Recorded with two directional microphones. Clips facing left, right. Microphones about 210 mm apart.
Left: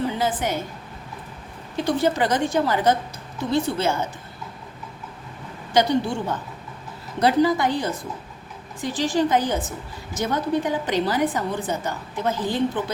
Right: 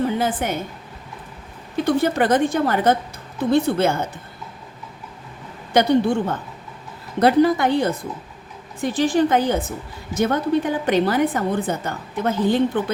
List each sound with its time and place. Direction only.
0.2 s a woman's voice: 55° right (ahead or behind)
1.7 s a woman's voice: 55° right (ahead or behind)
5.7 s a woman's voice: 55° right (ahead or behind)